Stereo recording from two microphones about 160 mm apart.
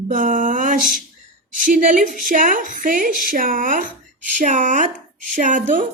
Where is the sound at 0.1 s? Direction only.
55° right (ahead or behind).